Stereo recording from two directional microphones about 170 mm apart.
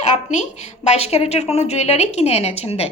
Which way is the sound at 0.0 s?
40° left (ahead or behind).